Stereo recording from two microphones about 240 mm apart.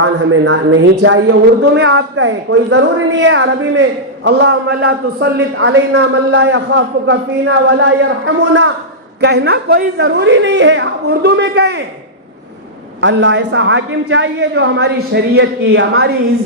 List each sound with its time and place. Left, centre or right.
0.0 s a man's voice: right
13.0 s a man's voice: right